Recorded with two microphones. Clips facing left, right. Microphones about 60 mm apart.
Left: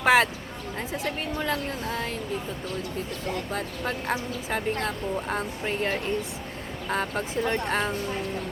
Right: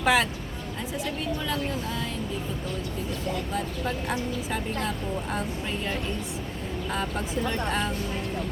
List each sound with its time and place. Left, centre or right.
0.0 s speech: left
1.0 s speech: left
4.5 s speech: left